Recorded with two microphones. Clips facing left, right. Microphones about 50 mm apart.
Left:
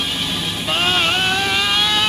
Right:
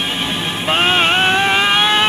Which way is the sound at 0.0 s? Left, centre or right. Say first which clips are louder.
Right 3 dB; right.